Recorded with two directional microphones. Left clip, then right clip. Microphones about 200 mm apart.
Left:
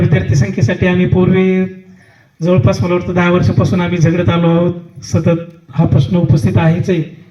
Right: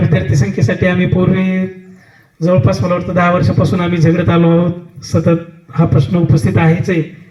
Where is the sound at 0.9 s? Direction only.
30° left (ahead or behind).